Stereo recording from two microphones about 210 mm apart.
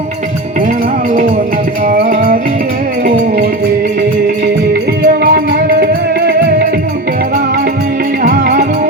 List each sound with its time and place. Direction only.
1.9 s music: 40° right (ahead or behind)
4.7 s music: 45° right (ahead or behind)
8.2 s music: 45° right (ahead or behind)